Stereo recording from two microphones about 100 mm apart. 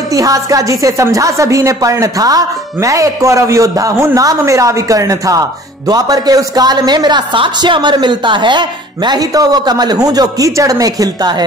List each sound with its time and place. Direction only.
0.1 s a woman's voice: 35° right (ahead or behind)